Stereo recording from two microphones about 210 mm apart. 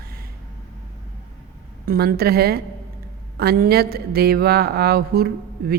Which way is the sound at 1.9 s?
45° right (ahead or behind).